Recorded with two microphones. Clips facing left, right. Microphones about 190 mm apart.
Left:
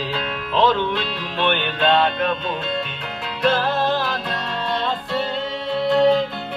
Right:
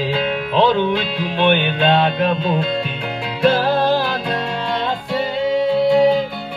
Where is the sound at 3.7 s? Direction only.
30° right (ahead or behind).